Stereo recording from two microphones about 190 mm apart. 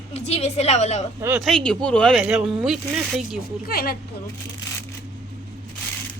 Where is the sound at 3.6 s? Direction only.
55° left (ahead or behind).